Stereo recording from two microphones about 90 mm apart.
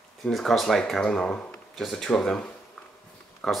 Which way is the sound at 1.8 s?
5° left (ahead or behind).